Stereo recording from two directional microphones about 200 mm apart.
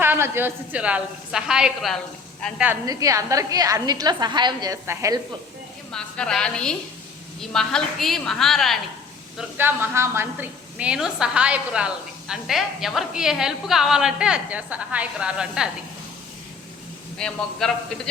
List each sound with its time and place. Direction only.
0.0 s a woman's voice: 10° right (ahead or behind)
2.8 s a woman's voice: 15° right (ahead or behind)
5.9 s a woman's voice: 5° left (ahead or behind)
9.4 s a woman's voice: 10° right (ahead or behind)
17.2 s a woman's voice: 5° left (ahead or behind)